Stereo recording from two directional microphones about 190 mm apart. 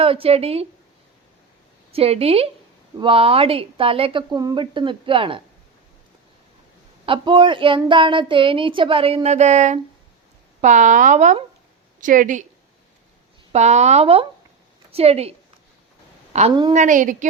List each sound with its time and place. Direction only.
0.0 s speech: 30° right (ahead or behind)
1.9 s speech: 30° right (ahead or behind)
7.0 s a woman's voice: 25° right (ahead or behind); by 12.5 s 45° right (ahead or behind)
13.5 s a woman's voice: 35° right (ahead or behind)